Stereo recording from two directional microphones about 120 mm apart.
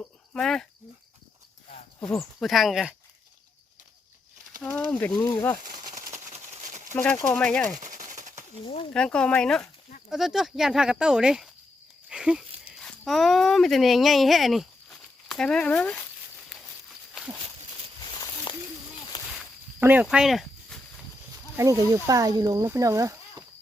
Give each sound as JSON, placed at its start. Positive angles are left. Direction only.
{"t": 0.3, "sound": "speech", "side_deg": 5}
{"t": 2.0, "sound": "speech", "side_deg": 0}
{"t": 4.6, "sound": "speech", "side_deg": 10}
{"t": 6.1, "sound": "a sound", "side_deg": -90}
{"t": 6.9, "sound": "speech", "side_deg": 15}
{"t": 7.8, "sound": "a sound", "side_deg": -90}
{"t": 8.9, "sound": "speech", "side_deg": 10}
{"t": 12.0, "sound": "a sound", "side_deg": -5}
{"t": 12.8, "sound": "speech", "side_deg": 0}
{"t": 16.5, "sound": "walk", "side_deg": 0}
{"t": 18.5, "sound": "a sound", "side_deg": 45}
{"t": 19.8, "sound": "speech", "side_deg": -15}
{"t": 21.5, "sound": "speech", "side_deg": -25}